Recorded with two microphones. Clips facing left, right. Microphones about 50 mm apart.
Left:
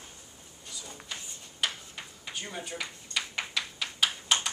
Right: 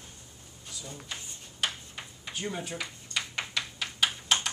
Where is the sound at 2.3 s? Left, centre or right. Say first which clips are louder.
Right 3 dB; centre.